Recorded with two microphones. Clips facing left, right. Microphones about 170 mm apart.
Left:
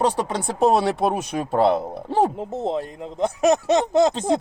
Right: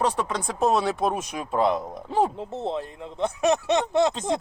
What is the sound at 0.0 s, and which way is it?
Speech, 30° left (ahead or behind).